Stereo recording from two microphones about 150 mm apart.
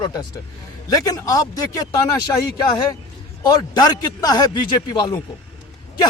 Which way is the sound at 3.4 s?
25° left (ahead or behind).